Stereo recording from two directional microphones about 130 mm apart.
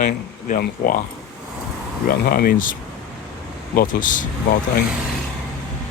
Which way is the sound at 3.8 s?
90° left.